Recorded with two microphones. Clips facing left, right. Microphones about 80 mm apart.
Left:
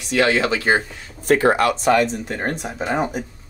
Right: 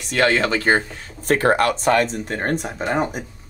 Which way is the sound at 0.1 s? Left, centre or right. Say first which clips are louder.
Even; right.